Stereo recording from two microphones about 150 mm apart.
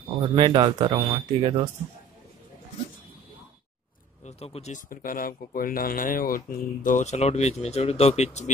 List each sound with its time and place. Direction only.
0.4 s a man's voice: 30° right (ahead or behind)
4.2 s speech: 45° left (ahead or behind)